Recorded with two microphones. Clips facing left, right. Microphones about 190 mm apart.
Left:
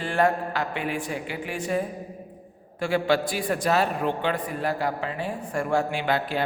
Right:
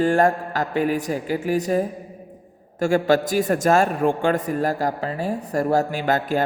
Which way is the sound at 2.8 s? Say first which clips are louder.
Right 5 dB; 45° right (ahead or behind).